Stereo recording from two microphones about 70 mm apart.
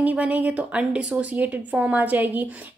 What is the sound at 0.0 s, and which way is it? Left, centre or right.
A woman's voice, right.